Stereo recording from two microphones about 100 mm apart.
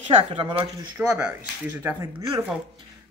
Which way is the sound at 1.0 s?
10° right (ahead or behind).